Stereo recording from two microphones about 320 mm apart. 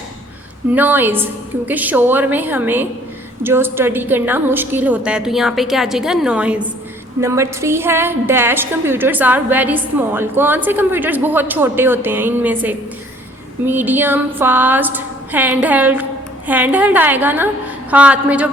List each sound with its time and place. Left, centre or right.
0.7 s a woman's voice: centre